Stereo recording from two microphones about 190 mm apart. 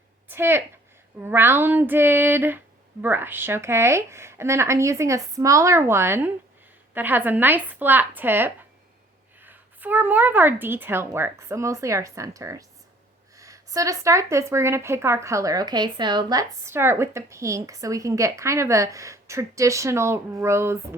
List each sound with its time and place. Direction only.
0.3 s a woman's voice: 10° right (ahead or behind)